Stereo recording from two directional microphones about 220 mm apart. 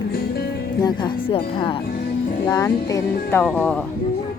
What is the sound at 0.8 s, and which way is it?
Speech, 20° left (ahead or behind).